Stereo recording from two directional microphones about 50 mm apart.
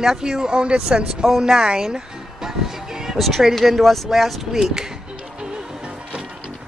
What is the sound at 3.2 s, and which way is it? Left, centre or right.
Speech, centre.